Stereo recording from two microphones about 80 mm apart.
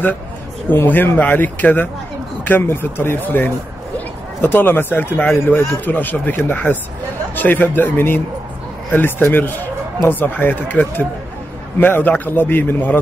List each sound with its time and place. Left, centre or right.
0.7 s speech: left